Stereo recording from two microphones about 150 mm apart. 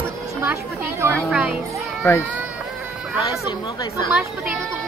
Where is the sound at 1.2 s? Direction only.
5° right (ahead or behind).